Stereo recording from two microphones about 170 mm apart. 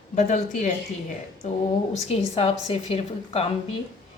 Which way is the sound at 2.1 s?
35° left (ahead or behind).